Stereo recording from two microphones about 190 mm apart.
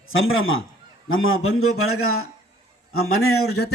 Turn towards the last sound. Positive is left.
turn(degrees=75)  # may be behind; listen again after turning